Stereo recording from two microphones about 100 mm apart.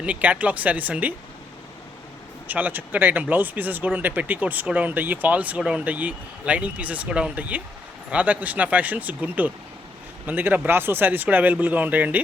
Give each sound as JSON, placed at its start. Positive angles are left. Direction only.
{"t": 0.0, "sound": "speech", "side_deg": -15}
{"t": 2.5, "sound": "speech", "side_deg": -15}